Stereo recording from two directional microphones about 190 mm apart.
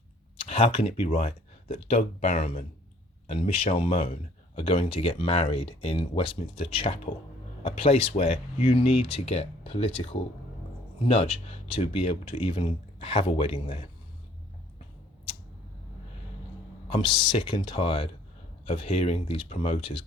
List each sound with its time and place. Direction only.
0.3 s speech: 30° left (ahead or behind)
16.9 s speech: 25° left (ahead or behind)